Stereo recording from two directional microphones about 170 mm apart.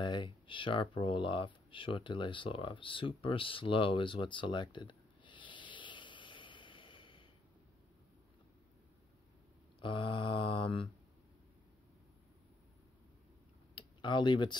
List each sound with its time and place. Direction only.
0.0 s speech: 25° left (ahead or behind)
9.8 s mantra: 30° left (ahead or behind)
13.7 s speech: 25° left (ahead or behind)